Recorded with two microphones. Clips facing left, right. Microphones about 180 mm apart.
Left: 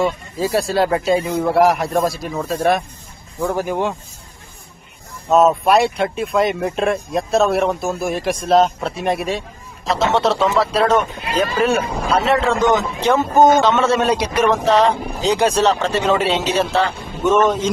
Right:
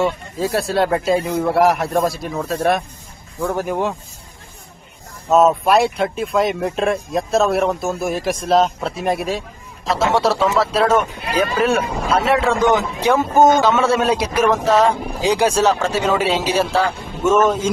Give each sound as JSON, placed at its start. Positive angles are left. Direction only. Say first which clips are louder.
{"t": 0.0, "sound": "speech", "louder": "even", "side_deg": 0}
{"t": 5.3, "sound": "a man's voice", "louder": "even", "side_deg": 0}